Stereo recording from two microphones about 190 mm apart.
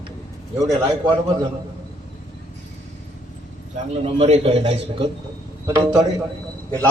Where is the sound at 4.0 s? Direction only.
30° right (ahead or behind).